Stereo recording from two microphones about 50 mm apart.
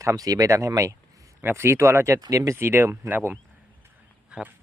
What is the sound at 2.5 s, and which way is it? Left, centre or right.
Speech, right.